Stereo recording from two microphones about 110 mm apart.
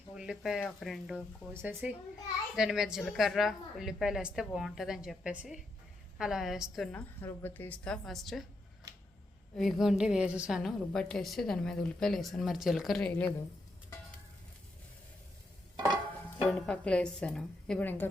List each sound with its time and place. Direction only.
0.2 s a woman's voice: 5° right (ahead or behind)
1.5 s speech: 20° right (ahead or behind)
2.6 s a woman's voice: 5° right (ahead or behind)
6.9 s a woman's voice: 20° left (ahead or behind)
8.0 s a woman's voice: centre (ahead or behind)
9.6 s a woman's voice: centre (ahead or behind)
16.5 s a woman's voice: 5° left (ahead or behind)
17.8 s a woman's voice: 20° left (ahead or behind)